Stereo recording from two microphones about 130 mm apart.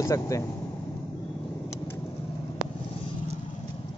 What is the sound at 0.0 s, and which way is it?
Speech, 25° left (ahead or behind).